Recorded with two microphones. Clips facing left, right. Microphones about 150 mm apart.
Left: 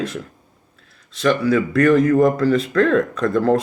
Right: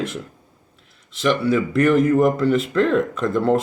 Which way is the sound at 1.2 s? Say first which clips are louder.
Left 2 dB; 25° right (ahead or behind).